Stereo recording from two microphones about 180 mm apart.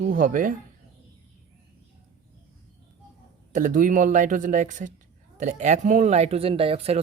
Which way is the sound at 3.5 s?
45° right (ahead or behind).